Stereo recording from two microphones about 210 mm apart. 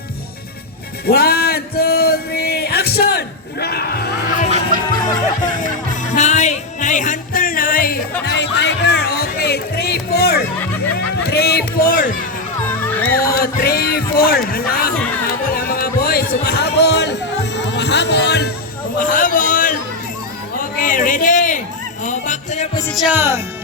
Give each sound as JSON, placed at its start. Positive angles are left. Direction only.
{"t": 1.0, "sound": "music", "side_deg": 45}
{"t": 8.2, "sound": "music", "side_deg": 55}
{"t": 10.9, "sound": "speech", "side_deg": 50}
{"t": 12.6, "sound": "music", "side_deg": 10}
{"t": 13.1, "sound": "a sound", "side_deg": 45}
{"t": 14.9, "sound": "music", "side_deg": 5}
{"t": 15.4, "sound": "music", "side_deg": 45}
{"t": 18.9, "sound": "a sound", "side_deg": 40}
{"t": 22.0, "sound": "music", "side_deg": 35}
{"t": 22.9, "sound": "speech", "side_deg": 0}